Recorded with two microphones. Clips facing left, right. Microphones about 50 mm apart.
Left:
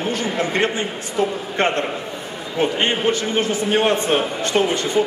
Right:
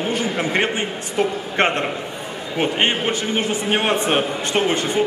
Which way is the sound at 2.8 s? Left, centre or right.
Right.